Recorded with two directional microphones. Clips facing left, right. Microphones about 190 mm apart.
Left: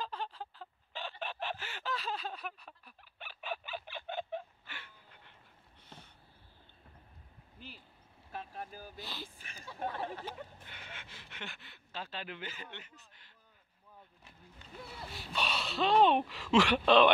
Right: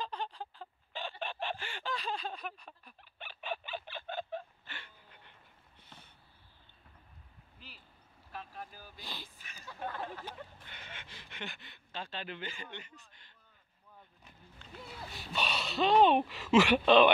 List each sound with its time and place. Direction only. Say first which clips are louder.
0.0 s chicken: right 1 dB; 5° left (ahead or behind)
8.5 s speech: left 3 dB; 45° left (ahead or behind)
9.9 s speech: left 2 dB; 25° left (ahead or behind)
10.2 s speech: left 2 dB; 5° left (ahead or behind)
14.9 s speech: right 1 dB; centre (ahead or behind)